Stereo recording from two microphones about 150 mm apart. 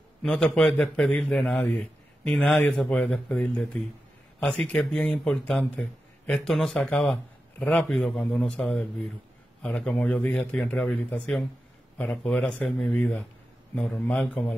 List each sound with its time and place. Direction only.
0.2 s a man's voice: 5° left (ahead or behind)